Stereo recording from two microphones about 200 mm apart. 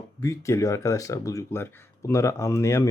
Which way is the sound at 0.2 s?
15° left (ahead or behind).